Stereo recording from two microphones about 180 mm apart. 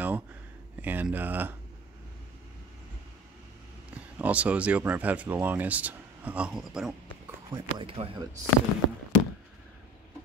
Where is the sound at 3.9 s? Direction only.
10° right (ahead or behind).